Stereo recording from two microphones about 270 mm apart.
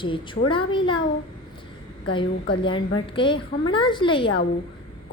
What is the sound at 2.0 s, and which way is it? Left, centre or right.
Speech, centre.